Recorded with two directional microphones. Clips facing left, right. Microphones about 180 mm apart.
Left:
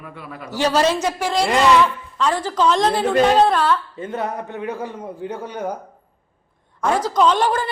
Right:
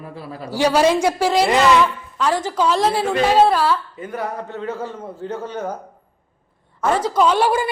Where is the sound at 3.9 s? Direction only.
25° left (ahead or behind).